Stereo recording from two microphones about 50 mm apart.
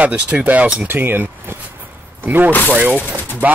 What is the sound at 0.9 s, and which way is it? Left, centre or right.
Speech, right.